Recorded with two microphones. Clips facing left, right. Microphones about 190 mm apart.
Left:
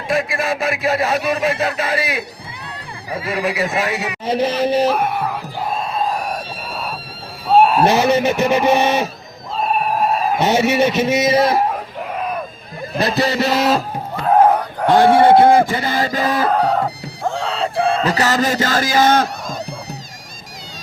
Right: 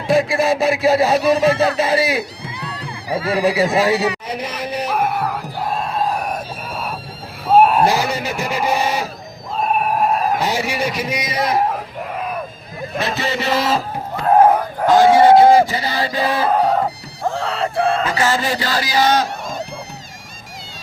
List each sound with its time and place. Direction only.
0.1 s speech: 30° right (ahead or behind)
3.2 s speech: 30° right (ahead or behind)
4.3 s speech: 25° left (ahead or behind)
4.9 s screaming: 5° right (ahead or behind)
7.5 s a sound: 5° right (ahead or behind)
7.9 s speech: 20° left (ahead or behind)
9.7 s a sound: 5° right (ahead or behind)
10.4 s speech: 25° left (ahead or behind)
13.0 s speech: 35° left (ahead or behind)
14.3 s a sound: 5° right (ahead or behind)
14.8 s speech: 60° left (ahead or behind)
16.5 s music: 5° right (ahead or behind)
18.0 s a man's voice: 40° left (ahead or behind)